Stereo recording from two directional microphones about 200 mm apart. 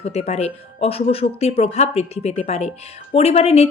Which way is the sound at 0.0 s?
30° left (ahead or behind).